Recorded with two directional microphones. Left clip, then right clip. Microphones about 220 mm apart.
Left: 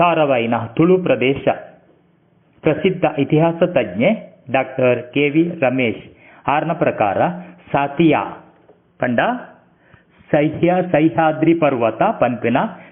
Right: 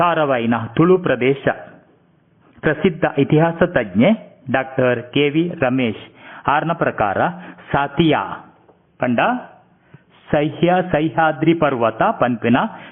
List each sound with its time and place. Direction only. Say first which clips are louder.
0.0 s a man's voice: left 2 dB; 20° right (ahead or behind)
3.0 s a man's voice: right 2 dB; 20° right (ahead or behind)
9.0 s speech: even; centre (ahead or behind)
10.3 s a man's voice: left 1 dB; 15° right (ahead or behind)